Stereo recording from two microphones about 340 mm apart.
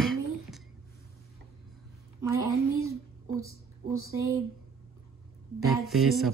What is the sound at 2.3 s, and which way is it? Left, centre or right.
A woman's voice, centre.